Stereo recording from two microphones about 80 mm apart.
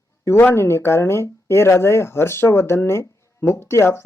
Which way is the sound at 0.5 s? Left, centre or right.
Left.